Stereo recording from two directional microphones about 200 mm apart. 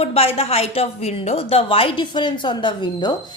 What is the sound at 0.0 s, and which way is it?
A woman's voice, 30° left (ahead or behind).